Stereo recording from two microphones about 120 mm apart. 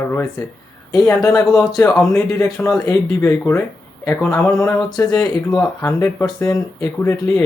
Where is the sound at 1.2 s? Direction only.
30° left (ahead or behind).